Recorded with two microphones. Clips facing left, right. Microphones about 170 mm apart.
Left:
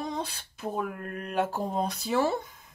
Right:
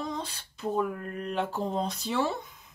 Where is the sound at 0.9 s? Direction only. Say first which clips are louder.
Left 1 dB; 55° left (ahead or behind).